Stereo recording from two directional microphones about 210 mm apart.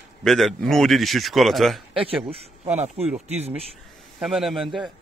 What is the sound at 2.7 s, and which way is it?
Speech, 30° right (ahead or behind).